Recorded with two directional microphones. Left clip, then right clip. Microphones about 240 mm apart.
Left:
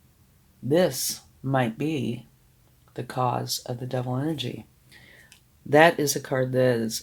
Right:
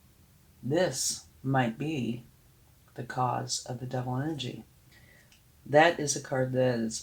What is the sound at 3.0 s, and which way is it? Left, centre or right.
Speech, left.